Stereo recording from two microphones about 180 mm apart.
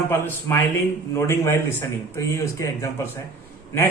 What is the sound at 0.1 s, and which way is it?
Speech, 10° left (ahead or behind).